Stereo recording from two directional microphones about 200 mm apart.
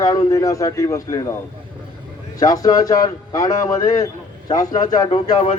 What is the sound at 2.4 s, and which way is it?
A man's voice, 20° left (ahead or behind).